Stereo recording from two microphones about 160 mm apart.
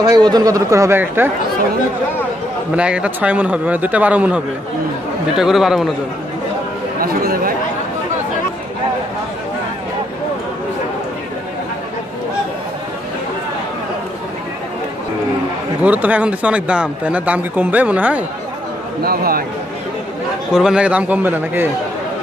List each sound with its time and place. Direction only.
0.0 s speech: 25° right (ahead or behind)
2.7 s a man's voice: 5° right (ahead or behind)
5.4 s a man's voice: centre (ahead or behind)
7.0 s chatter: 65° right (ahead or behind)
15.8 s a man's voice: 10° right (ahead or behind)
19.0 s a man's voice: 70° right (ahead or behind)
20.5 s a man's voice: 5° right (ahead or behind)